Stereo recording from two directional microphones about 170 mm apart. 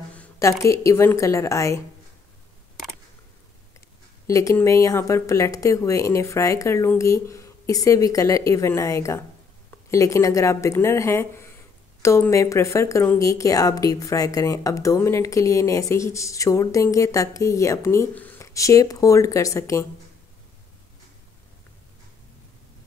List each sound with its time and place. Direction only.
0.1 s a woman's voice: 10° left (ahead or behind)
4.3 s speech: 20° left (ahead or behind)